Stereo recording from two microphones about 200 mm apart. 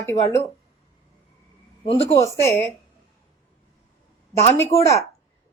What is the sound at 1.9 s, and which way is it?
Speech, 30° left (ahead or behind).